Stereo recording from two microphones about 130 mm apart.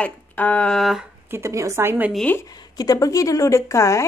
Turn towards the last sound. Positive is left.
turn(degrees=25)  # may be behind; listen again after turning